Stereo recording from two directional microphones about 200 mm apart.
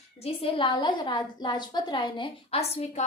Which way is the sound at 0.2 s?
25° left (ahead or behind).